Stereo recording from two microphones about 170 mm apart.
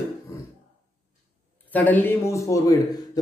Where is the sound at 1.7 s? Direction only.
10° left (ahead or behind).